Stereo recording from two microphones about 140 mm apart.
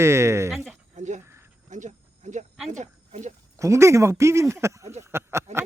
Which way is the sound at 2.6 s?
60° right (ahead or behind).